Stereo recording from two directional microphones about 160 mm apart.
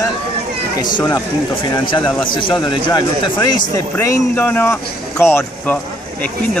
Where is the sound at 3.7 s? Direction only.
20° left (ahead or behind).